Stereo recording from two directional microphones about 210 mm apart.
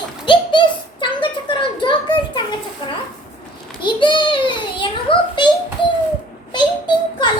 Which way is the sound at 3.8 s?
20° left (ahead or behind).